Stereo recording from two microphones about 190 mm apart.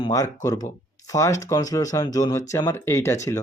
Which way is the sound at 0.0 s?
15° left (ahead or behind).